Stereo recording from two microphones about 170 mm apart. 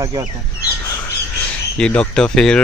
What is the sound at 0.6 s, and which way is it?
Bird, 20° left (ahead or behind).